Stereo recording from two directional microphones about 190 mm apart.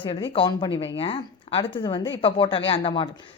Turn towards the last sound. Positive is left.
turn(degrees=25)  # may be behind; listen again after turning